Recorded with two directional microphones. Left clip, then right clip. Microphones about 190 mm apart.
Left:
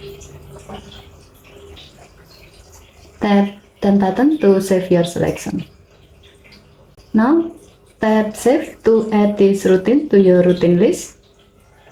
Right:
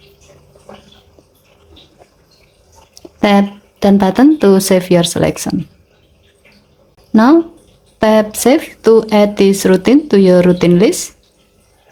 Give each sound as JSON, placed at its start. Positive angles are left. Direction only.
{"t": 3.2, "sound": "speech", "side_deg": -40}
{"t": 7.1, "sound": "speech", "side_deg": -45}